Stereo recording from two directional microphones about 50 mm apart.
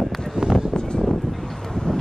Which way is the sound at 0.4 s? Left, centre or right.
Centre.